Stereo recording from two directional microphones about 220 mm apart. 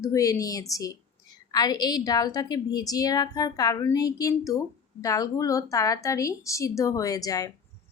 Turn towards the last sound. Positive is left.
turn(degrees=15)  # may be behind; listen again after turning